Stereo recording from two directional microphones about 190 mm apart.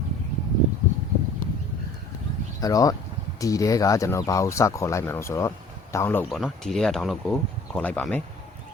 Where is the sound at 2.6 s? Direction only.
20° left (ahead or behind).